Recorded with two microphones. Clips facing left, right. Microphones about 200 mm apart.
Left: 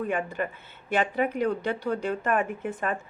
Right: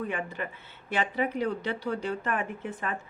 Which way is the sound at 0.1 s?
45° left (ahead or behind).